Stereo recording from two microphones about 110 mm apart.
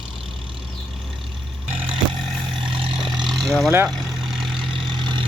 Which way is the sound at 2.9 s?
5° right (ahead or behind).